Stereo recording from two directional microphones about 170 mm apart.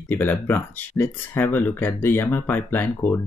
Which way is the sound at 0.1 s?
10° left (ahead or behind).